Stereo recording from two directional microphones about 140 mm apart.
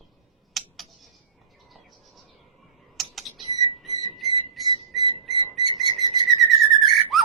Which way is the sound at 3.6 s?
Centre (ahead or behind).